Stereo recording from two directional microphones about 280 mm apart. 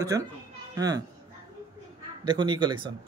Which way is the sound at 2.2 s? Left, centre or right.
Centre.